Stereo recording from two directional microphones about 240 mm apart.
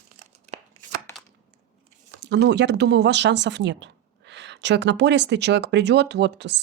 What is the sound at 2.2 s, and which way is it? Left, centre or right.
Speech, right.